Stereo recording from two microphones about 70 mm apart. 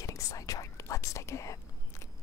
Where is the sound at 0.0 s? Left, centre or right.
Left.